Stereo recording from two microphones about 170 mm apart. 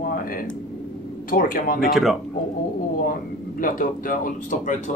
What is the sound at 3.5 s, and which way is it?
Speech, 55° left (ahead or behind).